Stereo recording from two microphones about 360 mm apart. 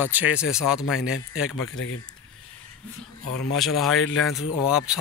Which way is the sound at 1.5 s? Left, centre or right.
Left.